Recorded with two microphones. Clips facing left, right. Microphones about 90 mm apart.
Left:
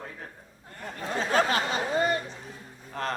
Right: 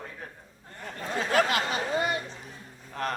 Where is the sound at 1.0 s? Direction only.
30° left (ahead or behind).